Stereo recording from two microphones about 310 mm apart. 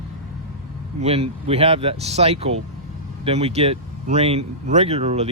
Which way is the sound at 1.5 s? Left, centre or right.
Centre.